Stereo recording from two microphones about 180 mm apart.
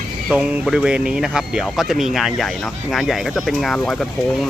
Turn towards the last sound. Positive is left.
turn(degrees=0)  # may be behind; listen again after turning